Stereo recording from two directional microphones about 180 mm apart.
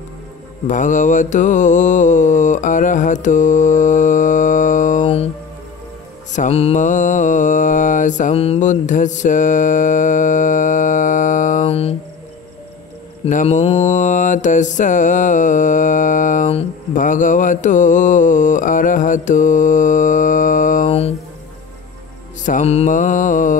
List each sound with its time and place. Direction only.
0.7 s mantra: 45° left (ahead or behind)
6.3 s mantra: 40° left (ahead or behind)
13.2 s mantra: 40° left (ahead or behind)
22.4 s mantra: 45° left (ahead or behind)